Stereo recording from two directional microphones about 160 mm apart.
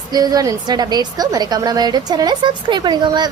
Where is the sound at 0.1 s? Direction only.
25° right (ahead or behind).